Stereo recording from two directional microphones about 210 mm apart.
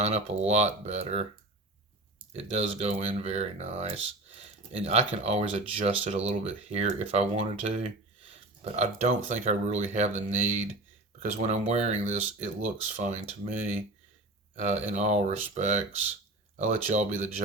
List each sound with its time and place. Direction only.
0.0 s speech: 30° right (ahead or behind)
2.3 s speech: 30° right (ahead or behind)
13.0 s speech: 35° right (ahead or behind)